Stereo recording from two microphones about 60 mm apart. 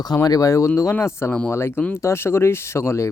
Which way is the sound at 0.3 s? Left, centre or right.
Left.